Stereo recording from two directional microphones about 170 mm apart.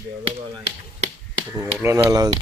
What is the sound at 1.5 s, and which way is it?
Speech, 15° right (ahead or behind).